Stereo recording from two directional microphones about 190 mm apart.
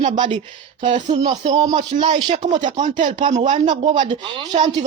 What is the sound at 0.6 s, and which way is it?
Speech, 25° right (ahead or behind).